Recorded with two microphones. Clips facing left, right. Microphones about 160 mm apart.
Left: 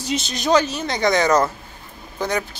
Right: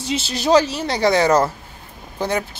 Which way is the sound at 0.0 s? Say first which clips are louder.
Right 2 dB; 30° right (ahead or behind).